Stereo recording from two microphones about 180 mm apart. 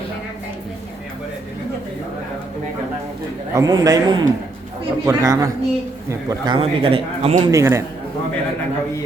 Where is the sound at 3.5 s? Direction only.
20° right (ahead or behind).